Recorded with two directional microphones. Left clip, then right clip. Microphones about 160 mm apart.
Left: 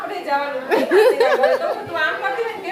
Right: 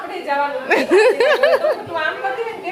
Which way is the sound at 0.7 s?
10° right (ahead or behind).